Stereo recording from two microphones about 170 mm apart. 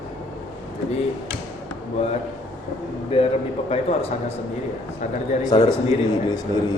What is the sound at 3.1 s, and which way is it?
Speech, 35° left (ahead or behind).